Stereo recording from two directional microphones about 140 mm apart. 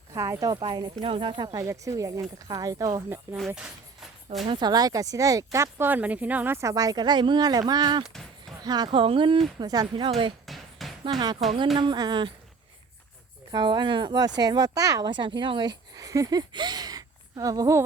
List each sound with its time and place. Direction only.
0.1 s speech: 25° right (ahead or behind)
1.5 s speech: 25° right (ahead or behind)
3.3 s speech: centre (ahead or behind)
4.4 s speech: 30° right (ahead or behind)
8.0 s speech: centre (ahead or behind)
8.6 s speech: 30° right (ahead or behind)
10.4 s basketball bounce: centre (ahead or behind)
11.0 s speech: 30° right (ahead or behind)
13.5 s speech: 35° right (ahead or behind)